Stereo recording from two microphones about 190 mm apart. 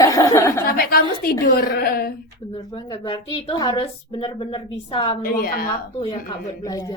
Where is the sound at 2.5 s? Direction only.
25° left (ahead or behind).